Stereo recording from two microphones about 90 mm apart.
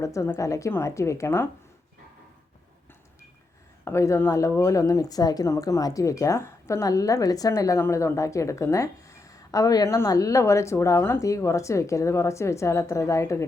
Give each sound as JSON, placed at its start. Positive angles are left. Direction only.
{"t": 0.0, "sound": "speech", "side_deg": 35}
{"t": 3.8, "sound": "speech", "side_deg": 30}